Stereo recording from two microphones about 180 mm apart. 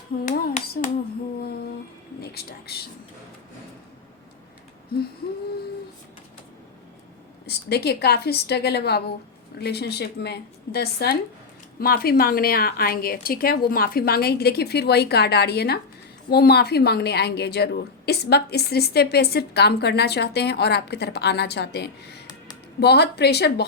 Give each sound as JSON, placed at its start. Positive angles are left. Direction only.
{"t": 2.2, "sound": "speech", "side_deg": 60}
{"t": 7.4, "sound": "a woman's voice", "side_deg": 65}